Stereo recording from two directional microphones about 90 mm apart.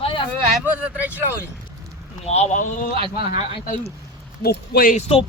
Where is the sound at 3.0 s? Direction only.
70° right (ahead or behind).